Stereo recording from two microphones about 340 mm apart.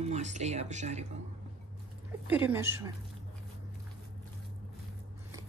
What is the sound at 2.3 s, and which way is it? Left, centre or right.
Speech, centre.